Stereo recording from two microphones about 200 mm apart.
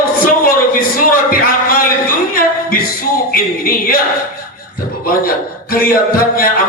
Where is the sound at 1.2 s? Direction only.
45° left (ahead or behind).